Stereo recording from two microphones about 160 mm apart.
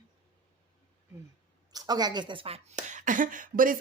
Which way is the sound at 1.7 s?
25° right (ahead or behind).